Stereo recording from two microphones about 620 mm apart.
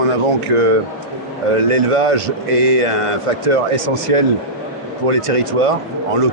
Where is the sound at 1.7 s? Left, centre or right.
Right.